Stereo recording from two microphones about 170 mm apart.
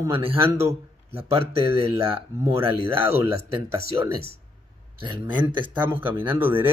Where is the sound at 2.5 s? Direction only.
30° right (ahead or behind).